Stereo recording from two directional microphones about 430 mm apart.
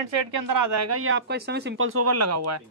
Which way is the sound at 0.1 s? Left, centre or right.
Right.